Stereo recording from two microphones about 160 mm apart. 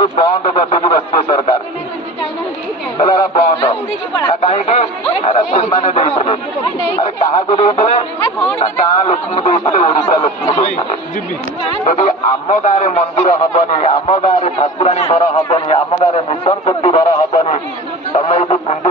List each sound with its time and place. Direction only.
0.0 s speech: 30° left (ahead or behind)
0.7 s speech: 40° left (ahead or behind)
3.0 s a sound: 40° left (ahead or behind)
4.3 s speech: 40° left (ahead or behind)
11.8 s speech: 50° left (ahead or behind)